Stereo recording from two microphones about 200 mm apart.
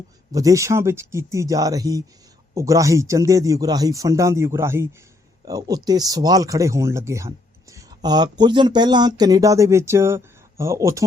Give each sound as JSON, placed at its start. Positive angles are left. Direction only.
{"t": 0.3, "sound": "speech", "side_deg": -15}